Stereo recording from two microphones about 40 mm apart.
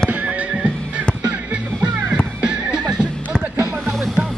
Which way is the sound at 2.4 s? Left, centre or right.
Right.